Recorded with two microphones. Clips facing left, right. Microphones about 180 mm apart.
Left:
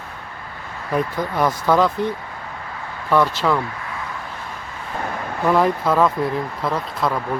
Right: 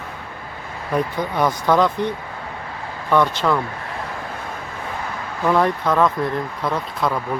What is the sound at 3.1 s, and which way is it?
Speech, 5° left (ahead or behind).